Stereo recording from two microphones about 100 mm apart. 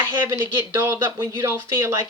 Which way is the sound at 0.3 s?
30° right (ahead or behind).